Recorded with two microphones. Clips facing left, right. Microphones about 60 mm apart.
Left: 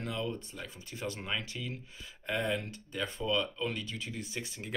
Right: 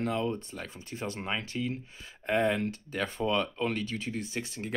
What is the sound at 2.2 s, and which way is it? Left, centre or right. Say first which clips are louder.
Speech: right 6 dB; right.